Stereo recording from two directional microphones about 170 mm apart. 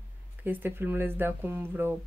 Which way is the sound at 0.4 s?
10° right (ahead or behind).